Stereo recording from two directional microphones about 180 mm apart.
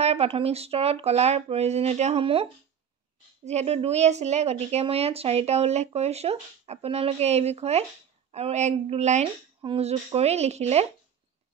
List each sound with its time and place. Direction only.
0.0 s a woman's voice: 35° right (ahead or behind)